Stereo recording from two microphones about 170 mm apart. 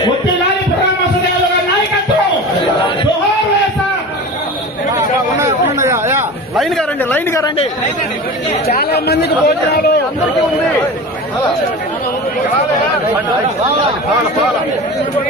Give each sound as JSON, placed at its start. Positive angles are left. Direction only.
{"t": 5.4, "sound": "a sound", "side_deg": -15}
{"t": 7.0, "sound": "speech", "side_deg": 10}
{"t": 8.6, "sound": "speech", "side_deg": 65}